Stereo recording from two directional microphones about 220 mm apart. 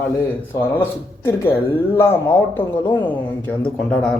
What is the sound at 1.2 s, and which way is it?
Speech, 10° left (ahead or behind).